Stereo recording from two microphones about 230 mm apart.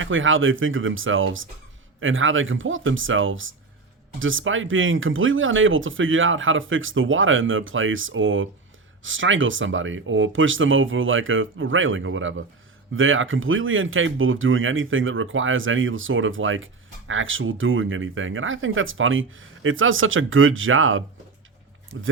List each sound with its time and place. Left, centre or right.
0.0 s speech: right